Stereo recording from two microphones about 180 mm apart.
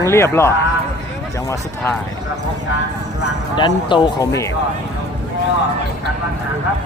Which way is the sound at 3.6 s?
25° left (ahead or behind).